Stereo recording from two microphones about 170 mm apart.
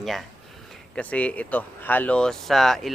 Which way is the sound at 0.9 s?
5° left (ahead or behind).